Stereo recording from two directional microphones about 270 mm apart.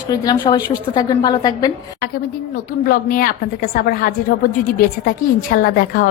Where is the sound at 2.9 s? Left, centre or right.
Left.